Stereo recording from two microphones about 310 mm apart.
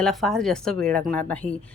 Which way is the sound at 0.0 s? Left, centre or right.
Centre.